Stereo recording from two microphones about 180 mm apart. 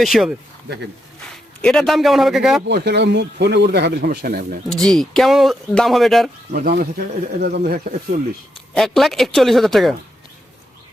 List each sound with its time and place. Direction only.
0.0 s speech: centre (ahead or behind)
2.6 s a man's voice: 65° right (ahead or behind)
4.8 s speech: 5° left (ahead or behind)
6.5 s a man's voice: 55° right (ahead or behind)
8.7 s speech: centre (ahead or behind)